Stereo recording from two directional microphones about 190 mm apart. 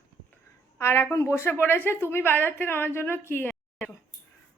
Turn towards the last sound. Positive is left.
turn(degrees=5)  # may be behind; listen again after turning